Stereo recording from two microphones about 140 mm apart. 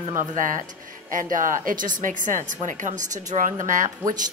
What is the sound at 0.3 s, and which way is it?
A woman's voice, 70° right (ahead or behind).